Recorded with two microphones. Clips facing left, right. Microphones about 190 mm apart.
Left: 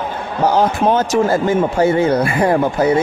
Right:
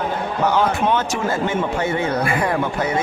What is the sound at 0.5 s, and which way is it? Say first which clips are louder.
A man's voice: left 5 dB; 40° left (ahead or behind).